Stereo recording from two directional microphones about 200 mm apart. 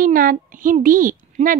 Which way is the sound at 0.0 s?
45° right (ahead or behind).